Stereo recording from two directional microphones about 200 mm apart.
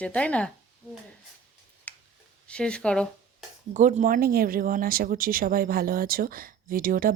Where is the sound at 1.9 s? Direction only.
10° left (ahead or behind).